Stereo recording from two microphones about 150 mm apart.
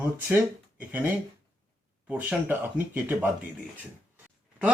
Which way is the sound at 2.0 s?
10° right (ahead or behind).